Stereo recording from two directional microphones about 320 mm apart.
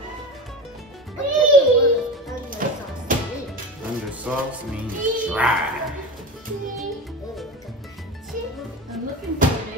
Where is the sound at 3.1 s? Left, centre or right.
Right.